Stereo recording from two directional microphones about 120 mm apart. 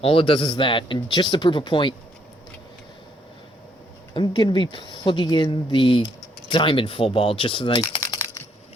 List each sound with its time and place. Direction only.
0.0 s speech: 50° left (ahead or behind)
4.1 s speech: 40° left (ahead or behind)
8.0 s computer keyboard: 30° left (ahead or behind)